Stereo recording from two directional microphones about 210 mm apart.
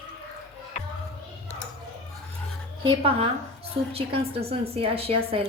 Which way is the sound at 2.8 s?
30° right (ahead or behind).